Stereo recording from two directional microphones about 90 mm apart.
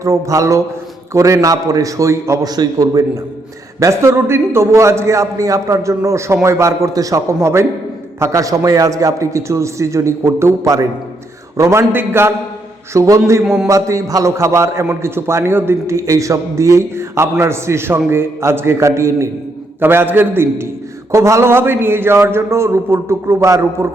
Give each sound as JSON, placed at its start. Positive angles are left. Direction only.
{"t": 0.0, "sound": "a man's voice", "side_deg": -35}
{"t": 12.9, "sound": "a man's voice", "side_deg": -35}
{"t": 13.4, "sound": "a man's voice", "side_deg": -5}
{"t": 13.7, "sound": "a man's voice", "side_deg": -35}